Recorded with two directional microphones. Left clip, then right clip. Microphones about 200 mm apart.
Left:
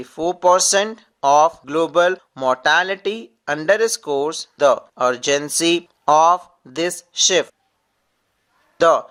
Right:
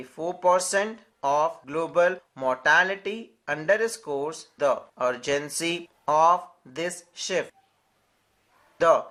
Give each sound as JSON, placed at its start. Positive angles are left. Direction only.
{"t": 0.0, "sound": "speech", "side_deg": 40}
{"t": 8.8, "sound": "speech", "side_deg": 45}